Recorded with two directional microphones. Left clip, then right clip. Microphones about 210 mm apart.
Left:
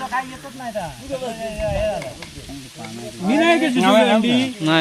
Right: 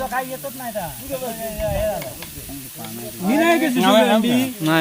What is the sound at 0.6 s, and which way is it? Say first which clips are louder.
Speech: left 5 dB; centre (ahead or behind).